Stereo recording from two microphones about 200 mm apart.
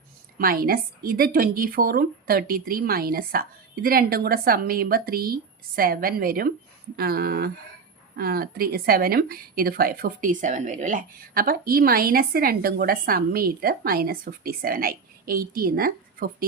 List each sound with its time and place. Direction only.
0.3 s speech: 45° right (ahead or behind)